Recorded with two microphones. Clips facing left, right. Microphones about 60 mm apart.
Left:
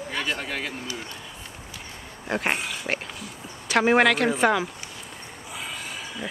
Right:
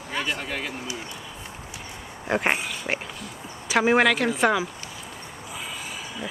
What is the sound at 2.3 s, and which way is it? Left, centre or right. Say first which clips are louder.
Speech: right 2 dB; centre.